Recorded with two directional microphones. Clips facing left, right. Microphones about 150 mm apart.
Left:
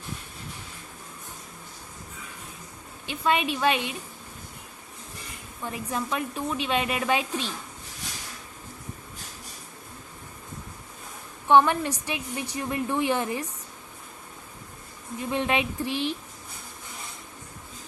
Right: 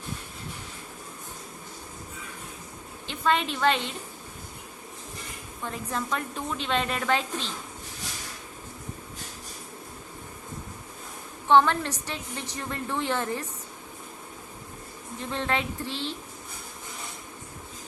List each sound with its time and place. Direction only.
3.1 s speech: 10° left (ahead or behind)
5.6 s speech: 10° left (ahead or behind)
11.4 s speech: 15° left (ahead or behind)
15.2 s speech: 15° left (ahead or behind)